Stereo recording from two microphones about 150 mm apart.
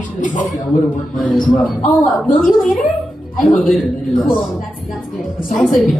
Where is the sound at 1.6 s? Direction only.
10° left (ahead or behind).